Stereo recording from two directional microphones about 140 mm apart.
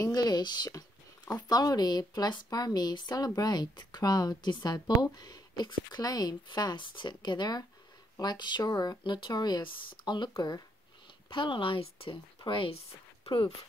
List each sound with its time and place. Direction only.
0.0 s a woman's voice: 30° left (ahead or behind)